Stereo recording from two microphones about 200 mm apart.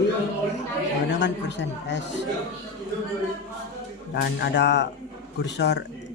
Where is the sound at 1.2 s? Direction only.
60° left (ahead or behind).